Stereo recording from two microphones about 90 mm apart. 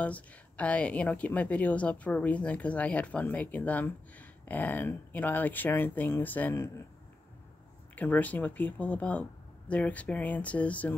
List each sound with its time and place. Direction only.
0.0 s a woman's voice: 15° left (ahead or behind)
7.9 s a woman's voice: 20° left (ahead or behind)